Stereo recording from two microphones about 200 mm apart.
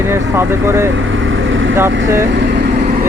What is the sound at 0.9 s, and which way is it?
Vehicle, 75° right (ahead or behind).